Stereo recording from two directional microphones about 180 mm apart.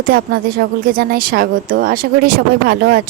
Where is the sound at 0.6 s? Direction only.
60° right (ahead or behind).